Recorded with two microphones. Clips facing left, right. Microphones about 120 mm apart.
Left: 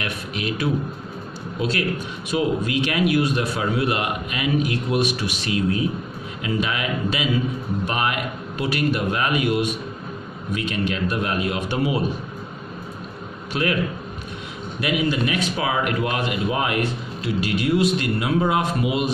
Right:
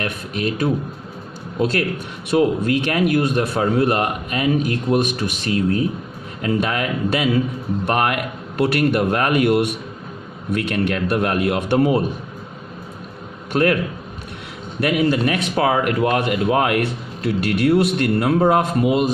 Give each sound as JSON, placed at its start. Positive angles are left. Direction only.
{"t": 0.0, "sound": "a man's voice", "side_deg": -45}
{"t": 13.5, "sound": "a man's voice", "side_deg": -50}
{"t": 14.8, "sound": "a man's voice", "side_deg": -55}